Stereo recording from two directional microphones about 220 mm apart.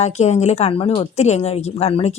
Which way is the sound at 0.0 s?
30° left (ahead or behind).